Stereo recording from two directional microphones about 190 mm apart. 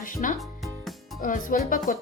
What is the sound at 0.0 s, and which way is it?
Music, 45° left (ahead or behind).